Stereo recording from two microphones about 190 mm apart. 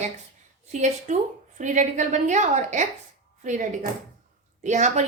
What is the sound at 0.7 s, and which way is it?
Speech, 40° right (ahead or behind).